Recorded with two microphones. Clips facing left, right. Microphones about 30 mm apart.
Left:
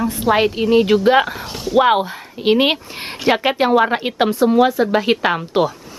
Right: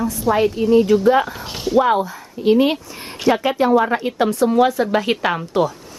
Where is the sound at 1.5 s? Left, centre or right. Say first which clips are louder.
Right 1 dB; centre.